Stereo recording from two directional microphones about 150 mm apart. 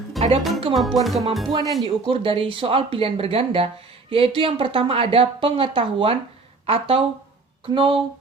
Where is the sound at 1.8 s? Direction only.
35° right (ahead or behind).